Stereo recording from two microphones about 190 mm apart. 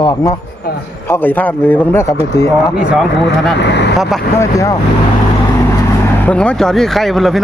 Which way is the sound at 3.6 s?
65° left (ahead or behind).